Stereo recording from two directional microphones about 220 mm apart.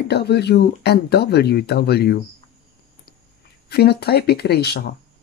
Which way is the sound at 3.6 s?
45° left (ahead or behind).